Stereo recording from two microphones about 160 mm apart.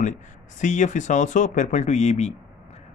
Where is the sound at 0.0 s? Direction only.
50° left (ahead or behind).